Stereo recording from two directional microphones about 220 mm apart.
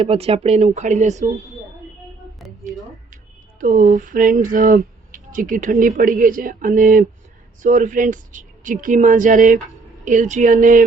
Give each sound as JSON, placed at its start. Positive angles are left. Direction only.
{"t": 0.0, "sound": "speech", "side_deg": -25}
{"t": 2.6, "sound": "a sound", "side_deg": 0}
{"t": 3.6, "sound": "speech", "side_deg": -35}